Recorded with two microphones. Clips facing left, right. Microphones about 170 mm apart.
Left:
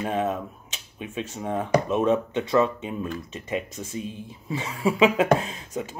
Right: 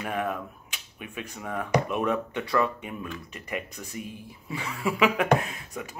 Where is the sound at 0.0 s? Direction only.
25° left (ahead or behind).